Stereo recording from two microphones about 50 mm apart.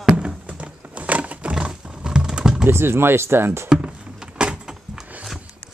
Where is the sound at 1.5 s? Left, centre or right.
Centre.